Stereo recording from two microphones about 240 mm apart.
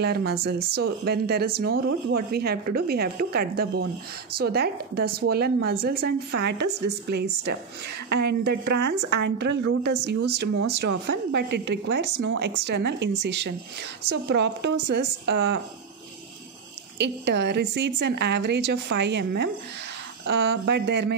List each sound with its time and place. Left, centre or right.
0.0 s speech: right
8.1 s a woman's voice: right
11.3 s a woman's voice: right
17.0 s a woman's voice: right